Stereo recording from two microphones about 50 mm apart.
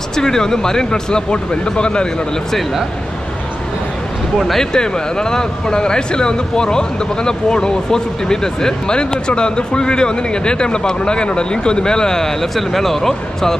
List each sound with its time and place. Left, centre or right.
0.1 s speech: centre
4.4 s speech: centre
4.7 s speech: centre